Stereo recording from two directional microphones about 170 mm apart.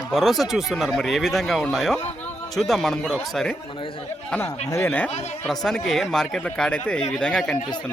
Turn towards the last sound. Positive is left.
turn(degrees=5)  # may be behind; listen again after turning